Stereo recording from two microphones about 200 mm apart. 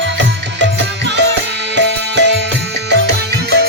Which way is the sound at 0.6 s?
60° right (ahead or behind).